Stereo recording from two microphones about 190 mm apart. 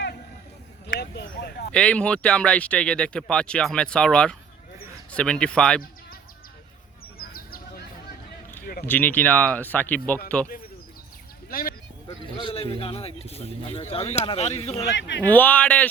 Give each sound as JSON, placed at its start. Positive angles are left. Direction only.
{"t": 0.9, "sound": "speech", "side_deg": 55}
{"t": 1.7, "sound": "speech", "side_deg": 5}
{"t": 7.2, "sound": "bird", "side_deg": 50}
{"t": 8.9, "sound": "speech", "side_deg": 10}
{"t": 12.4, "sound": "a man's voice", "side_deg": 25}
{"t": 14.8, "sound": "speech", "side_deg": 65}
{"t": 15.2, "sound": "speech", "side_deg": 10}